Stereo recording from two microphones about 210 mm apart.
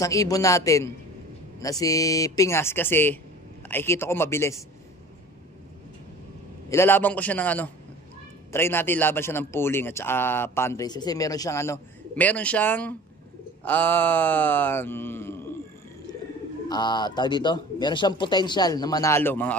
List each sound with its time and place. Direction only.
0.0 s a man's voice: 15° left (ahead or behind)
6.7 s a man's voice: 10° left (ahead or behind)
16.6 s speech: 20° left (ahead or behind)